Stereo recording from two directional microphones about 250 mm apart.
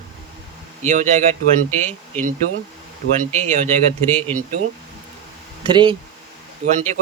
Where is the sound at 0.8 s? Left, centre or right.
Right.